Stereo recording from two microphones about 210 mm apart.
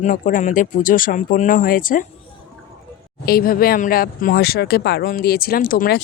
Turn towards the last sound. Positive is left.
turn(degrees=45)  # may be behind; listen again after turning